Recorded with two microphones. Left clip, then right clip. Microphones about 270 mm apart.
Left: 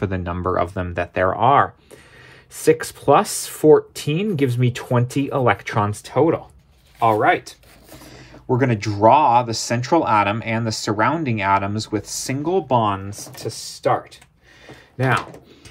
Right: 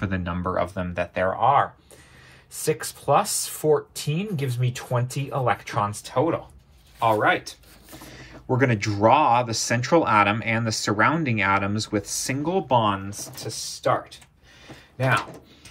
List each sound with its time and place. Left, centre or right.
0.0 s speech: left